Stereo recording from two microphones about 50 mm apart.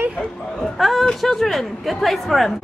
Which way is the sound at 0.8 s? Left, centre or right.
Centre.